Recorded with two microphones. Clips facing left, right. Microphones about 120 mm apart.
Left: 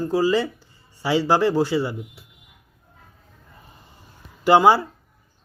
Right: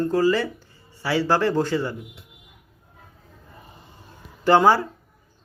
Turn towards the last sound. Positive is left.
turn(degrees=15)  # may be behind; listen again after turning